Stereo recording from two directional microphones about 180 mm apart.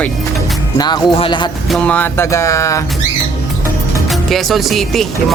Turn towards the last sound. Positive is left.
turn(degrees=0)  # may be behind; listen again after turning